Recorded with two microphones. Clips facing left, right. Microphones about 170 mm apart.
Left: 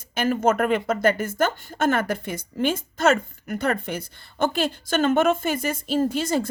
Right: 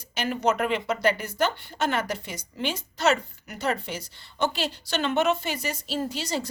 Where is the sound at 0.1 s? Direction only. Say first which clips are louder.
Left 4 dB; 50° left (ahead or behind).